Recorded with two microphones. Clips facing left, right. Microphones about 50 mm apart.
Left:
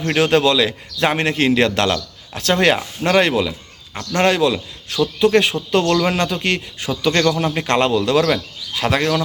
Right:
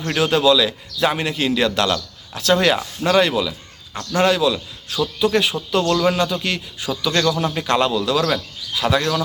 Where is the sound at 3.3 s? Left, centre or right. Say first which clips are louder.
Left 2 dB; left.